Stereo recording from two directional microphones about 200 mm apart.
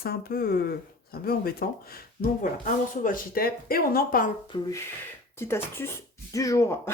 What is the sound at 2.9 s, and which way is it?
Speech, 45° left (ahead or behind).